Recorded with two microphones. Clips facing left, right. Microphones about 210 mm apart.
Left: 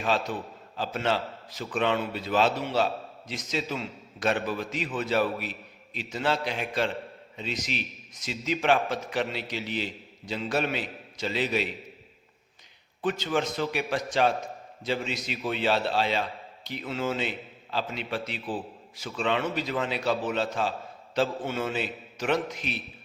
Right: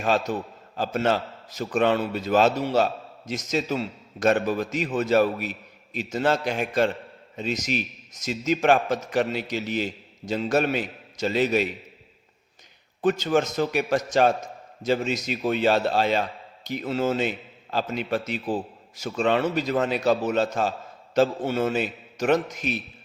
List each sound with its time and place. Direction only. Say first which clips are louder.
0.0 s a man's voice: right 4 dB; 45° right (ahead or behind)
13.0 s a man's voice: right 6 dB; 45° right (ahead or behind)